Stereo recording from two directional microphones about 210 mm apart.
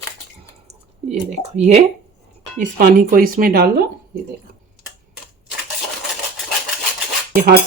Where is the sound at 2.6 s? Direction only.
40° right (ahead or behind).